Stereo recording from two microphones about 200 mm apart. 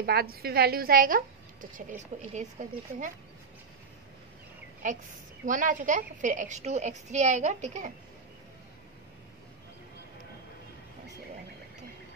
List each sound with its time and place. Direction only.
0.0 s a woman's voice: 50° right (ahead or behind)
4.8 s a woman's voice: 40° right (ahead or behind)